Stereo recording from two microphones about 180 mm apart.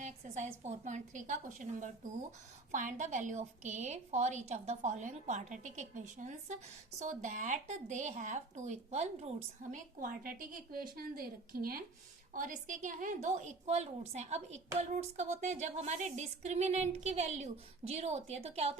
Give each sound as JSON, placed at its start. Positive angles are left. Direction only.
{"t": 0.0, "sound": "a woman's voice", "side_deg": -40}
{"t": 9.7, "sound": "a woman's voice", "side_deg": -50}